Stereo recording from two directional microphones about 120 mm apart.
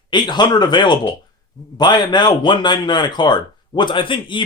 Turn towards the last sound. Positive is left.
turn(degrees=45)  # may be behind; listen again after turning